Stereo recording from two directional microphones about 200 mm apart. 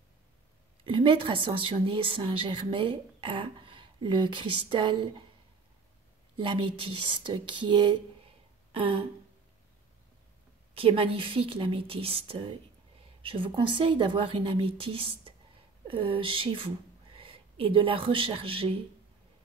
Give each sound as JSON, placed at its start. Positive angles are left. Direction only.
{"t": 0.8, "sound": "speech", "side_deg": -25}
{"t": 6.3, "sound": "speech", "side_deg": -25}
{"t": 8.7, "sound": "a sound", "side_deg": -25}
{"t": 10.7, "sound": "speech", "side_deg": -30}